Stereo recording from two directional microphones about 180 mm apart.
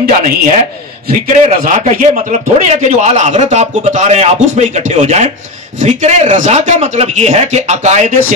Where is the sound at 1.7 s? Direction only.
40° right (ahead or behind).